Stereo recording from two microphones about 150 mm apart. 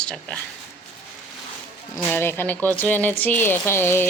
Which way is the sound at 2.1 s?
15° left (ahead or behind).